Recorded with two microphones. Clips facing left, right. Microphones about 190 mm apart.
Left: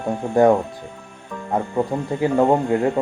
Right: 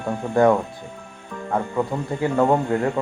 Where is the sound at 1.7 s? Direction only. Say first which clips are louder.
Left 2 dB; 20° left (ahead or behind).